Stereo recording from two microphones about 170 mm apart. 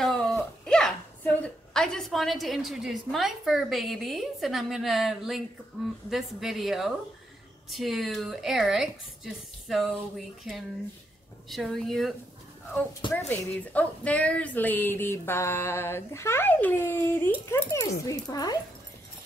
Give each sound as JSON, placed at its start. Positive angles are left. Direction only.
{"t": 0.0, "sound": "a sound", "side_deg": 0}
{"t": 0.4, "sound": "a woman's voice", "side_deg": 5}
{"t": 13.3, "sound": "a woman's voice", "side_deg": 10}